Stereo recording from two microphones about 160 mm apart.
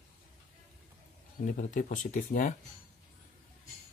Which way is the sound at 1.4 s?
50° left (ahead or behind).